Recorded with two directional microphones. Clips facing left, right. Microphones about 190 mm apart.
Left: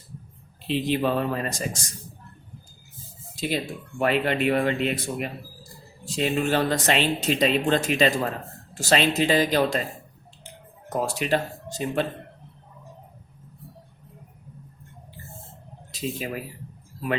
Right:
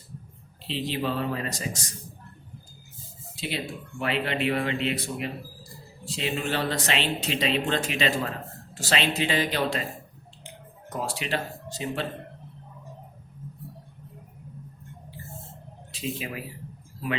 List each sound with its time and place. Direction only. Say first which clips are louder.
0.7 s speech: left 5 dB; 50° left (ahead or behind)
3.3 s speech: left 5 dB; 45° left (ahead or behind)
10.8 s speech: left 6 dB; 45° left (ahead or behind)
15.9 s speech: left 3 dB; 40° left (ahead or behind)